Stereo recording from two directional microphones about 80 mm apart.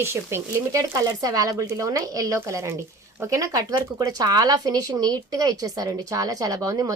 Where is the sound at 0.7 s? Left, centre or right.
Right.